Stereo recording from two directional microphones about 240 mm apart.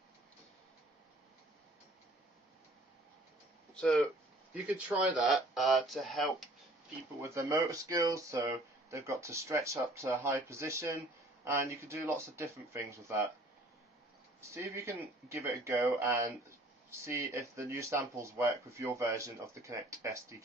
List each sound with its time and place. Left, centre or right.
3.7 s speech: centre
7.2 s speech: centre
14.5 s speech: centre